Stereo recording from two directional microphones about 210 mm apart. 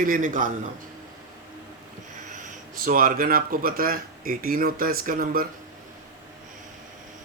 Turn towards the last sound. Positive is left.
turn(degrees=-45)  # may be behind; listen again after turning